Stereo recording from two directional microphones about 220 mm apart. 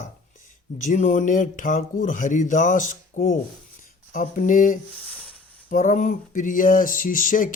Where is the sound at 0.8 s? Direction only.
35° left (ahead or behind).